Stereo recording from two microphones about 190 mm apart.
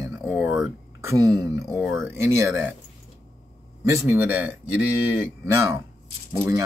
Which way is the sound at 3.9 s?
15° right (ahead or behind).